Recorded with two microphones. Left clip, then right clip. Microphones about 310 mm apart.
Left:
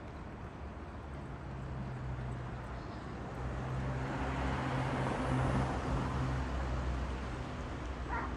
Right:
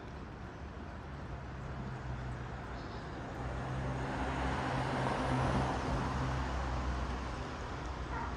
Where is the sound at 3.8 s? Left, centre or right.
Right.